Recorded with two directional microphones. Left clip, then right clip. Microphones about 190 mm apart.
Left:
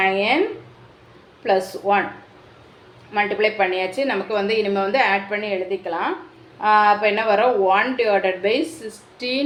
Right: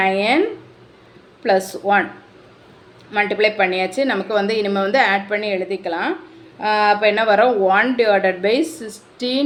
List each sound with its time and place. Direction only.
0.0 s speech: 30° right (ahead or behind)
1.5 s speech: 30° right (ahead or behind)
3.1 s a woman's voice: 30° right (ahead or behind)